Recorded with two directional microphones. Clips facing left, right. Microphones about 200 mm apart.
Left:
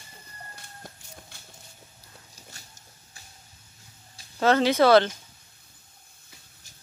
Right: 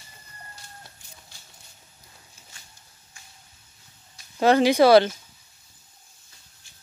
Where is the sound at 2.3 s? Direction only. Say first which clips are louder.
Left 4 dB; 40° left (ahead or behind).